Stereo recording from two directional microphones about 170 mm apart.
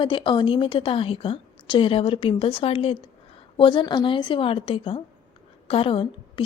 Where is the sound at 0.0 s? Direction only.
30° left (ahead or behind).